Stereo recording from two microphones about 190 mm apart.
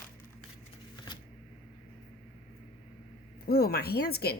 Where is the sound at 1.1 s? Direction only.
25° left (ahead or behind).